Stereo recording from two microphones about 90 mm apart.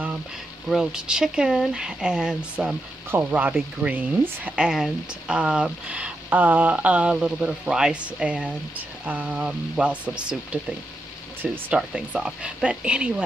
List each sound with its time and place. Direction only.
0.7 s speech: 5° right (ahead or behind)